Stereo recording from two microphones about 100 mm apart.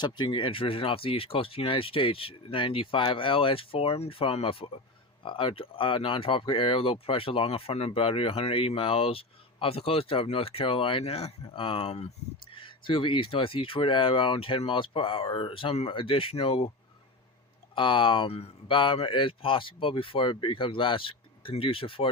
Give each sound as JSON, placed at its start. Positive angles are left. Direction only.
{"t": 0.0, "sound": "speech", "side_deg": 50}
{"t": 5.2, "sound": "speech", "side_deg": 60}
{"t": 11.5, "sound": "speech", "side_deg": 60}
{"t": 17.7, "sound": "speech", "side_deg": 55}
{"t": 18.8, "sound": "speech", "side_deg": 60}